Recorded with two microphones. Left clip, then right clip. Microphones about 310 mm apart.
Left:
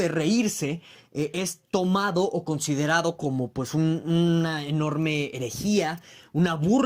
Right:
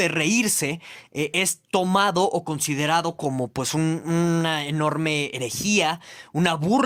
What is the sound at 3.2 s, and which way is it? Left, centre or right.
Speech, right.